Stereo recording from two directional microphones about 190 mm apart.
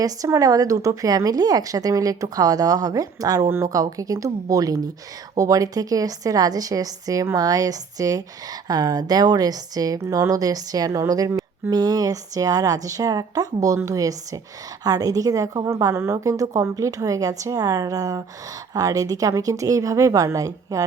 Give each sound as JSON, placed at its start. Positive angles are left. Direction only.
{"t": 0.0, "sound": "a woman's voice", "side_deg": -15}